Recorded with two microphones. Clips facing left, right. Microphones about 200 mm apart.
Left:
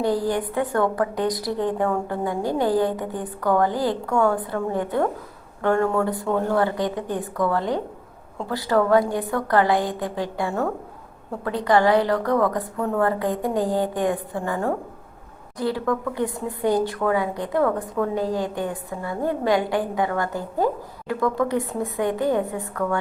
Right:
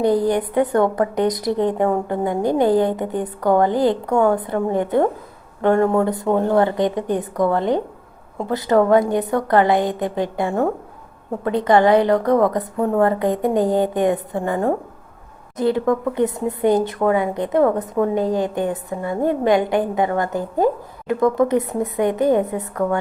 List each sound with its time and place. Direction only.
0.0 s speech: 20° right (ahead or behind)